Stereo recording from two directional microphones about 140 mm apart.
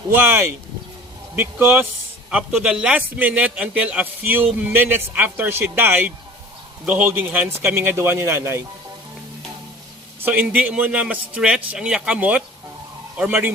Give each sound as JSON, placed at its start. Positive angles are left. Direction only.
{"t": 0.1, "sound": "a man's voice", "side_deg": -15}
{"t": 10.2, "sound": "a man's voice", "side_deg": -10}